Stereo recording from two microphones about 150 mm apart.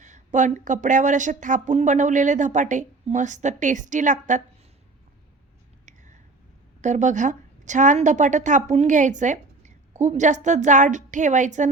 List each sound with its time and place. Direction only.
0.0 s a woman's voice: 55° right (ahead or behind)
6.8 s a woman's voice: 55° right (ahead or behind)